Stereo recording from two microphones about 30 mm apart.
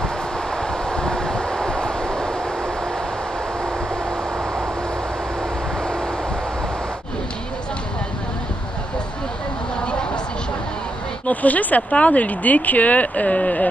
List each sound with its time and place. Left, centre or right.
0.6 s train: left
11.2 s speech: left